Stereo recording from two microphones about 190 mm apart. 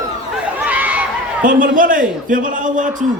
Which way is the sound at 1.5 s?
45° right (ahead or behind).